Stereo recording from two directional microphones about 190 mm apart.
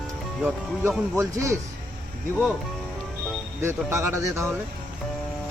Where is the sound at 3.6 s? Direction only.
15° right (ahead or behind).